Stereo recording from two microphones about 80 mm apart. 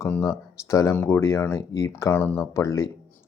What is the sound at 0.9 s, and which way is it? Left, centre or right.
Speech, left.